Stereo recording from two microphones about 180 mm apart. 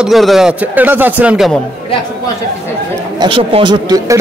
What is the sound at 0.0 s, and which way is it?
Speech, centre (ahead or behind).